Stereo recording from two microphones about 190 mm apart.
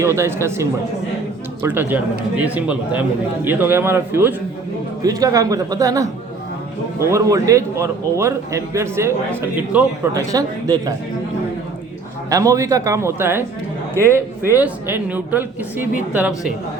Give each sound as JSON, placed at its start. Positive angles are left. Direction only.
{"t": 0.0, "sound": "speech", "side_deg": -15}
{"t": 2.4, "sound": "speech", "side_deg": -10}
{"t": 12.3, "sound": "speech", "side_deg": -15}